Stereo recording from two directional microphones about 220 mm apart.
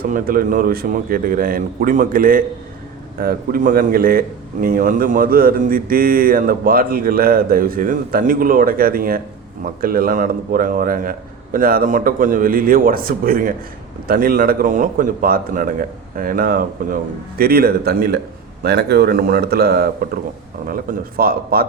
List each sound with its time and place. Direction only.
0.0 s a man's voice: 40° right (ahead or behind)